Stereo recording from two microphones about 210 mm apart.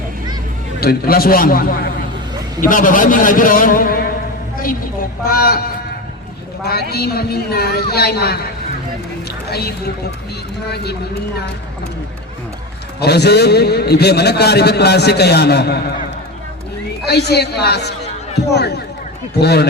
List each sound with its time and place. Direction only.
0.8 s a man's voice: 45° left (ahead or behind)
5.2 s a man's voice: 45° left (ahead or behind)
6.9 s a man's voice: 50° left (ahead or behind)
9.5 s a man's voice: 50° left (ahead or behind)
13.0 s a man's voice: 50° left (ahead or behind)
17.1 s a man's voice: 50° left (ahead or behind)
19.4 s a man's voice: 50° left (ahead or behind)